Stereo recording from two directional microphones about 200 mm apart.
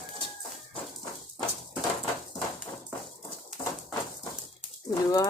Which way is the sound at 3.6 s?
20° left (ahead or behind).